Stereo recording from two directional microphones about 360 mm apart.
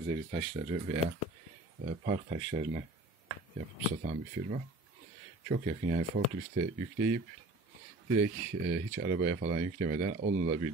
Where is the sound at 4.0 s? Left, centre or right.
Right.